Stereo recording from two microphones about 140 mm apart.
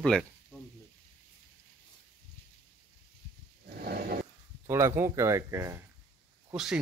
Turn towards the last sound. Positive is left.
turn(degrees=-5)  # may be behind; listen again after turning